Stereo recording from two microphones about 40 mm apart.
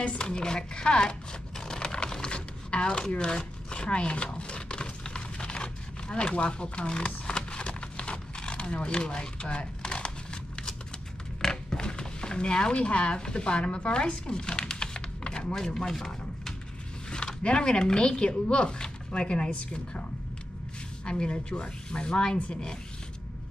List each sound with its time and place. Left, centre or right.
0.0 s speech: left
1.6 s sewing machine: centre
3.3 s a sound: left
15.6 s a sound: centre
17.1 s speech: left
21.0 s speech: left